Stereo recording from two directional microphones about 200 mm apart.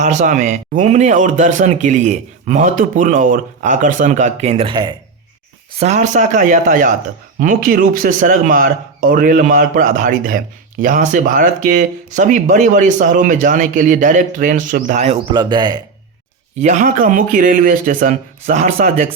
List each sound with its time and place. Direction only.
0.0 s speech: 35° right (ahead or behind); by 4.9 s 20° right (ahead or behind)
5.7 s speech: 35° right (ahead or behind)
15.3 s speech: 20° right (ahead or behind)
16.6 s speech: 35° right (ahead or behind)